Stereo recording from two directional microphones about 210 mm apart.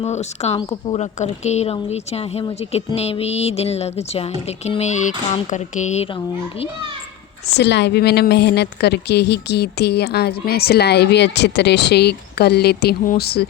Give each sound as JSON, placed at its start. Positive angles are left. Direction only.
{"t": 0.0, "sound": "a woman's voice", "side_deg": 30}
{"t": 7.6, "sound": "a woman's voice", "side_deg": 55}